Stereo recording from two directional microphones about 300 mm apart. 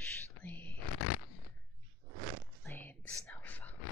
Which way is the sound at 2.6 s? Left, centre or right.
Centre.